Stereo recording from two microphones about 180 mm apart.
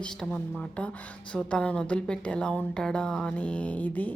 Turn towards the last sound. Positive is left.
turn(degrees=10)  # may be behind; listen again after turning